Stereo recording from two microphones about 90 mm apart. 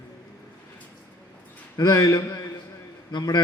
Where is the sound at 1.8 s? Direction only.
40° left (ahead or behind).